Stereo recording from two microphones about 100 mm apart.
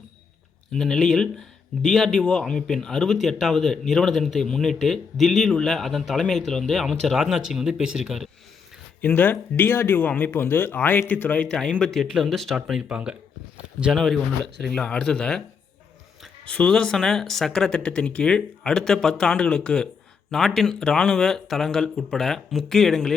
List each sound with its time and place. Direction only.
0.7 s speech: 5° left (ahead or behind)
9.0 s speech: 20° left (ahead or behind)